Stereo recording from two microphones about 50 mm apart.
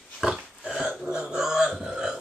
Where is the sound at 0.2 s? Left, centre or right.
Centre.